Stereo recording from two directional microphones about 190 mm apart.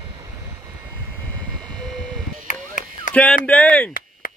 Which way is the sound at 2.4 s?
40° left (ahead or behind).